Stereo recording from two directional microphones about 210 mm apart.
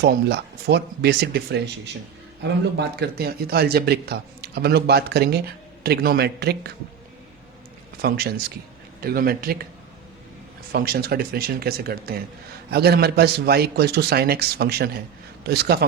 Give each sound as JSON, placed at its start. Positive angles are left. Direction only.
{"t": 0.0, "sound": "speech", "side_deg": -50}
{"t": 8.0, "sound": "speech", "side_deg": -50}
{"t": 10.7, "sound": "speech", "side_deg": -45}